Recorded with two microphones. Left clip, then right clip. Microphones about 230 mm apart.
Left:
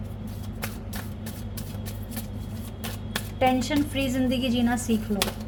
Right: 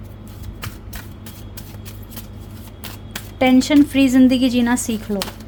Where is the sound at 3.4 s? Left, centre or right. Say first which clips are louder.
Right 9 dB; right.